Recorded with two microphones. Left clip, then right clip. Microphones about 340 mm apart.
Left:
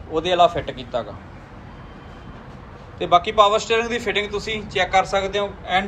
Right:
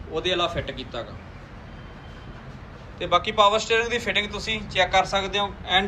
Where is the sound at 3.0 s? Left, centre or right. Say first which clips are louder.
Left 4 dB; centre.